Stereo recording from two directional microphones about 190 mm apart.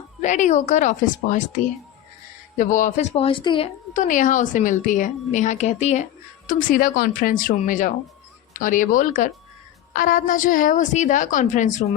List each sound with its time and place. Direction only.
0.2 s a woman's voice: 40° left (ahead or behind)
2.6 s a woman's voice: 45° left (ahead or behind); by 3.7 s 25° left (ahead or behind)
3.9 s a woman's voice: 40° left (ahead or behind)